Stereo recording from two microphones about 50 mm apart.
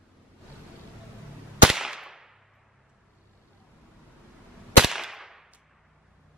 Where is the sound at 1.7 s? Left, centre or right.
Centre.